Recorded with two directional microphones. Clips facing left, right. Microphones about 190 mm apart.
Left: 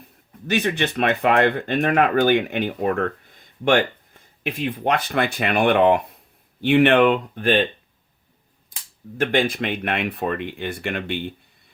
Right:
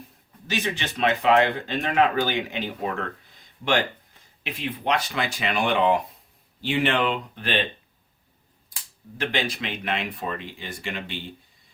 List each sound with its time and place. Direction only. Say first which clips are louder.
0.4 s speech: left 7 dB; 55° left (ahead or behind)
9.1 s speech: left 7 dB; 50° left (ahead or behind)